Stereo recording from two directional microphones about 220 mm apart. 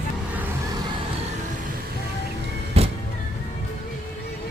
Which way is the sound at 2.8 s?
30° right (ahead or behind).